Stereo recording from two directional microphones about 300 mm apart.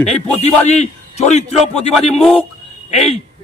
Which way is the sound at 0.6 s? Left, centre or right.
Left.